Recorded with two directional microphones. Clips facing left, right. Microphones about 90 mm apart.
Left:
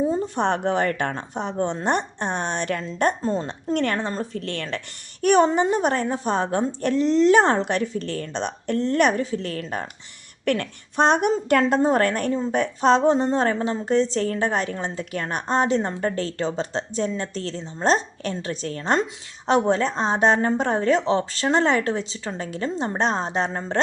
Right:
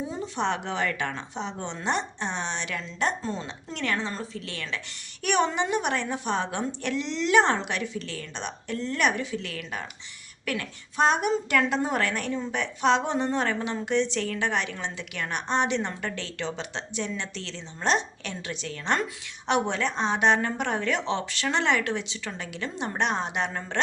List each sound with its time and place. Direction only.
0.0 s speech: 45° left (ahead or behind)
5.2 s a woman's voice: 40° left (ahead or behind)
10.4 s a woman's voice: 55° left (ahead or behind); by 23.8 s 30° left (ahead or behind)